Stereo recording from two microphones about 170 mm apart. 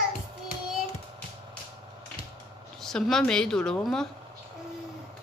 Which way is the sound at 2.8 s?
5° left (ahead or behind).